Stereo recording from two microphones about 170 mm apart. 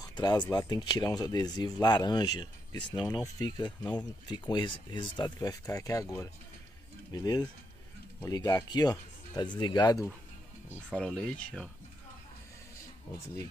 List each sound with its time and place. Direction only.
0.0 s speech: 25° left (ahead or behind)
10.7 s speech: 5° left (ahead or behind)